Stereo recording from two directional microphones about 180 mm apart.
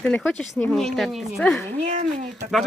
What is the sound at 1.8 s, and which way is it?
Speech, 40° right (ahead or behind).